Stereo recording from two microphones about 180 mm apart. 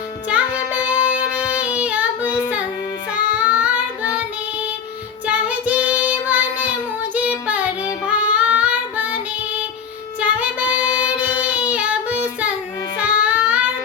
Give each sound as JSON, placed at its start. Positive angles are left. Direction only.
{"t": 0.3, "sound": "child singing", "side_deg": -5}
{"t": 2.2, "sound": "child singing", "side_deg": 15}
{"t": 3.3, "sound": "child singing", "side_deg": -5}
{"t": 7.1, "sound": "female singing", "side_deg": -5}
{"t": 8.0, "sound": "child singing", "side_deg": -10}
{"t": 10.2, "sound": "child singing", "side_deg": -5}
{"t": 13.0, "sound": "music", "side_deg": -5}